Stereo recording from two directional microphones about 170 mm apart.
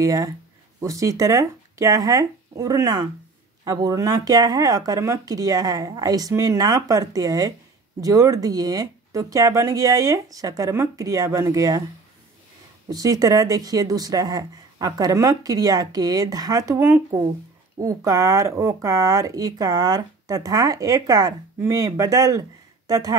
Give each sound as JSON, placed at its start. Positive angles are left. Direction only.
{"t": 0.0, "sound": "speech", "side_deg": -20}
{"t": 12.9, "sound": "speech", "side_deg": -20}